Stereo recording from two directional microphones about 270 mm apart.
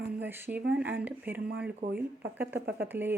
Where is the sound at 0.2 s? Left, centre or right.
Centre.